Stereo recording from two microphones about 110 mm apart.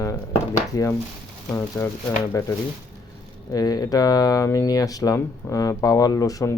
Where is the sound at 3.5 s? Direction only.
35° left (ahead or behind).